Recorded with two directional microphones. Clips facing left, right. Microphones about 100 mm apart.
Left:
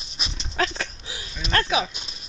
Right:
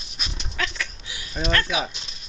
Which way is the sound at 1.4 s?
30° left (ahead or behind).